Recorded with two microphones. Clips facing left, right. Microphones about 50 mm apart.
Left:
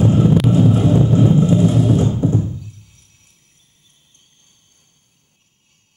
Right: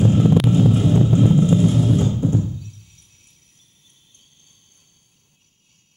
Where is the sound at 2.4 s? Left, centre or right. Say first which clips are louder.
Left 2 dB; centre.